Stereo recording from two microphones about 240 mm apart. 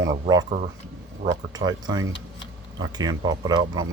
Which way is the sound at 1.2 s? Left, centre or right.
Centre.